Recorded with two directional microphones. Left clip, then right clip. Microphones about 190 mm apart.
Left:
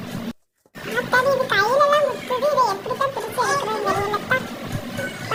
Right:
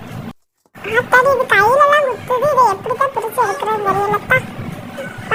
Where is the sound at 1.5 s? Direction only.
15° right (ahead or behind).